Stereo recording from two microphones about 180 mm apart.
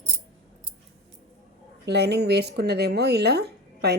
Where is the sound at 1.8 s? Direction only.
65° right (ahead or behind).